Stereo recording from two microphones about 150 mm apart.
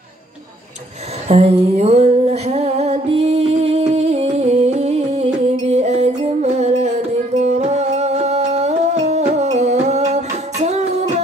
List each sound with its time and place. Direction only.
1.3 s music: 40° right (ahead or behind)